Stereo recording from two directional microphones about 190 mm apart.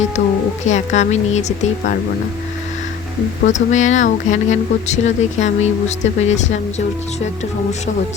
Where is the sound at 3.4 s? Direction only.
40° left (ahead or behind).